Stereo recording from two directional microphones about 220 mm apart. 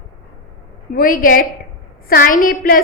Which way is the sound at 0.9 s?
40° left (ahead or behind).